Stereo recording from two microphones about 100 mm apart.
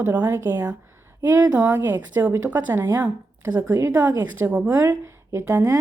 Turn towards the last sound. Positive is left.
turn(degrees=-30)  # may be behind; listen again after turning